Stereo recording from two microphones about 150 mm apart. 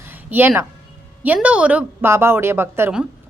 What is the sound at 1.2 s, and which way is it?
A woman's voice, 10° right (ahead or behind).